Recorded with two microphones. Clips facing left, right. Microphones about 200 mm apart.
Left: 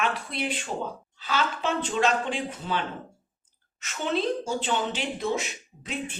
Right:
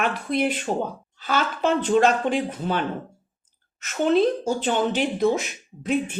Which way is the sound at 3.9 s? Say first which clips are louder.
Right 8 dB; 50° right (ahead or behind).